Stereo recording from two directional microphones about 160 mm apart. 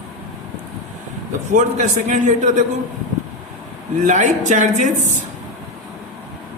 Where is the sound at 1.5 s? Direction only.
50° right (ahead or behind).